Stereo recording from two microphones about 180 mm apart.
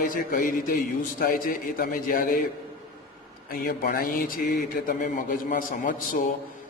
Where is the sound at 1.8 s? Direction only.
50° left (ahead or behind).